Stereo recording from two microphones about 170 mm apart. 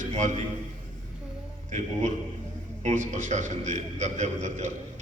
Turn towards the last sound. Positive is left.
turn(degrees=-45)  # may be behind; listen again after turning